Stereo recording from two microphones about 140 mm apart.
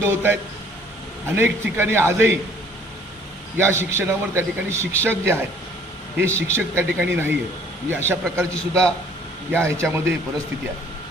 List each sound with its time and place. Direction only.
0.0 s a man's voice: 15° right (ahead or behind)
1.4 s a man's voice: 15° right (ahead or behind)
3.6 s a man's voice: 20° right (ahead or behind)
9.9 s a man's voice: 20° right (ahead or behind)